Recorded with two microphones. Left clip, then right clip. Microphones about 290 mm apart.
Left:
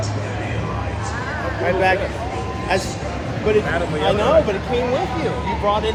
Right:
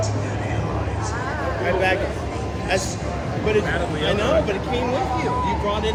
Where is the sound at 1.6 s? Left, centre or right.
Centre.